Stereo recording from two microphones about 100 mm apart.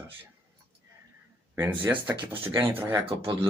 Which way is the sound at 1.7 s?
55° right (ahead or behind).